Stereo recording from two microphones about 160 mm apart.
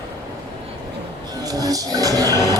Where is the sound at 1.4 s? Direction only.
25° right (ahead or behind).